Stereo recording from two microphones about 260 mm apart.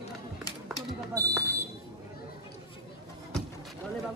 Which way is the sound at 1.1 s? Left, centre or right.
Centre.